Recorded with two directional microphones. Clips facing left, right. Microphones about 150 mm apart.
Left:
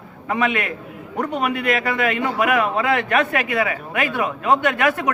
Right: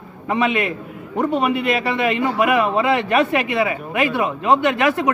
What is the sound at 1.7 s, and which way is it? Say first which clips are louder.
Speech: right 1 dB; 25° right (ahead or behind).